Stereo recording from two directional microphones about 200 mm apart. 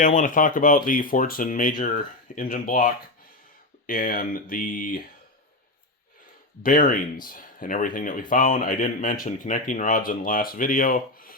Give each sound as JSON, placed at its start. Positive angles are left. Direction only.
{"t": 0.0, "sound": "speech", "side_deg": 40}
{"t": 6.6, "sound": "speech", "side_deg": 45}